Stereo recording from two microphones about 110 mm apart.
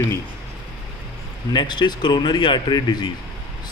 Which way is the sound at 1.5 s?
45° left (ahead or behind).